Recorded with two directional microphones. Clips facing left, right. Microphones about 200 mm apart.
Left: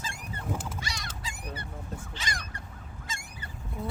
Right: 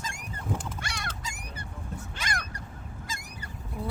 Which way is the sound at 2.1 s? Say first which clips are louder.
Right 4 dB; 55° right (ahead or behind).